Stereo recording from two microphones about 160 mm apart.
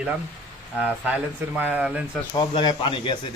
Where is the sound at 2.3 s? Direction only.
25° left (ahead or behind).